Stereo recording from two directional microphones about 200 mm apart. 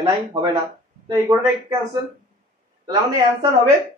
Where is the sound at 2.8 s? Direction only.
20° right (ahead or behind).